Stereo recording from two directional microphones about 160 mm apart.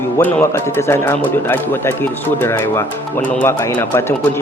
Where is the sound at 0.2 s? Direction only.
10° left (ahead or behind).